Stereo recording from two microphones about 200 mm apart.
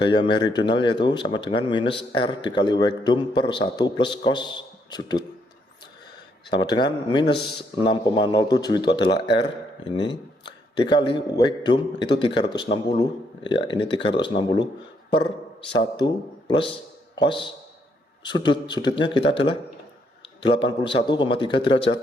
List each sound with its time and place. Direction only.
0.0 s speech: 25° left (ahead or behind)
6.5 s a man's voice: 25° left (ahead or behind)
15.7 s speech: 20° left (ahead or behind)